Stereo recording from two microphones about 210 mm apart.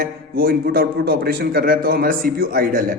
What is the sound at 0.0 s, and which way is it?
A man's voice, 45° right (ahead or behind).